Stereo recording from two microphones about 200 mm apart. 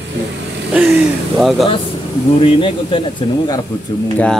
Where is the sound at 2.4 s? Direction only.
25° left (ahead or behind).